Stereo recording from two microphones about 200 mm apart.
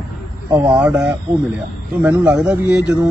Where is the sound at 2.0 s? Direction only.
5° right (ahead or behind).